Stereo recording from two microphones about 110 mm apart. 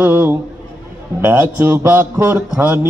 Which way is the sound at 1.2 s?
20° right (ahead or behind).